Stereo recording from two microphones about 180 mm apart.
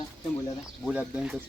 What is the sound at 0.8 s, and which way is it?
Speech, 5° right (ahead or behind).